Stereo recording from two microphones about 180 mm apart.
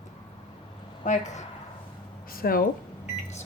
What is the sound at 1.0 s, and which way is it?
Speech, 40° left (ahead or behind).